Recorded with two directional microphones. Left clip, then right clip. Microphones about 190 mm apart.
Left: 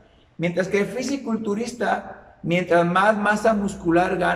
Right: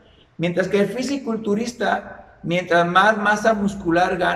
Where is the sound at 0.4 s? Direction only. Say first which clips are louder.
Right 3 dB; centre (ahead or behind).